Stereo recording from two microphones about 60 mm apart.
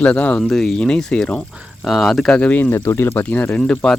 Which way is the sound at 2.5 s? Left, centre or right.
Left.